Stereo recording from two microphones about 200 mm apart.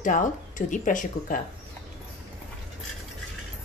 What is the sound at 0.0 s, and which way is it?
Speech, 40° left (ahead or behind).